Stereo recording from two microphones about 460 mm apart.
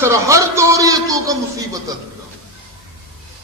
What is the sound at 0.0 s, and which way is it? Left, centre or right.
A man's voice, centre.